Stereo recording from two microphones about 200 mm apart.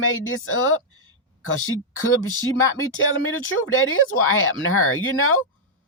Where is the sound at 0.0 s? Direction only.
90° left.